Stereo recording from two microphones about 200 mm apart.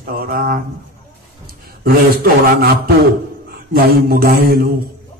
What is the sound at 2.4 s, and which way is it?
A man's voice, 50° right (ahead or behind).